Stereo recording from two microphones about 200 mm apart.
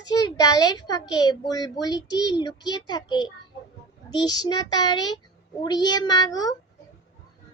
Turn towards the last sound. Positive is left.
turn(degrees=20)  # may be behind; listen again after turning